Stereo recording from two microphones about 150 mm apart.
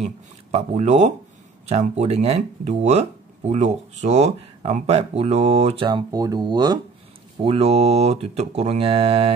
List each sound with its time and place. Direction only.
0.0 s speech: 45° right (ahead or behind)
5.9 s speech: 25° right (ahead or behind)
7.4 s speech: 45° right (ahead or behind)